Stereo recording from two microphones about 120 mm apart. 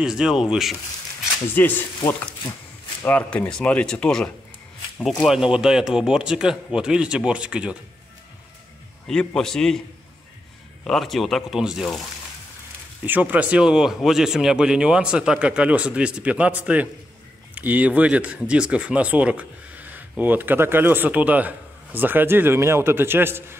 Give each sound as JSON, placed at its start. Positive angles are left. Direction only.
{"t": 0.0, "sound": "speech", "side_deg": -5}
{"t": 1.5, "sound": "speech", "side_deg": 15}
{"t": 5.2, "sound": "speech", "side_deg": -5}
{"t": 9.0, "sound": "speech", "side_deg": 5}
{"t": 10.8, "sound": "speech", "side_deg": 5}
{"t": 13.0, "sound": "speech", "side_deg": -15}